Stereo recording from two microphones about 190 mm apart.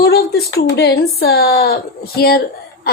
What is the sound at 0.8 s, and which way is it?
A woman's voice, 60° left (ahead or behind).